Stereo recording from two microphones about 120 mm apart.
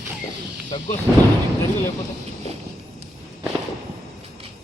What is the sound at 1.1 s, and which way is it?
Speech, 25° left (ahead or behind).